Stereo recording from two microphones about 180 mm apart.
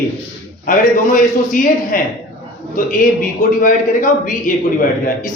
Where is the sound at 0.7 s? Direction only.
50° left (ahead or behind).